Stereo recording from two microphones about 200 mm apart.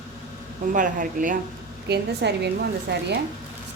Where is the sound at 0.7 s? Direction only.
40° right (ahead or behind).